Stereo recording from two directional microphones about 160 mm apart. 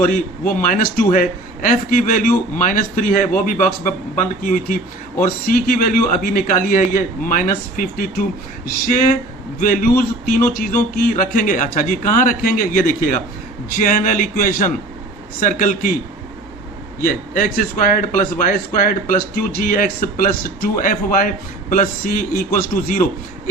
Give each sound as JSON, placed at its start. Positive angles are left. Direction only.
{"t": 0.1, "sound": "a man's voice", "side_deg": 60}
{"t": 10.0, "sound": "a man's voice", "side_deg": 70}
{"t": 17.0, "sound": "a man's voice", "side_deg": 60}